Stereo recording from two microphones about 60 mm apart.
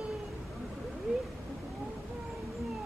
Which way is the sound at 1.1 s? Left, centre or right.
Centre.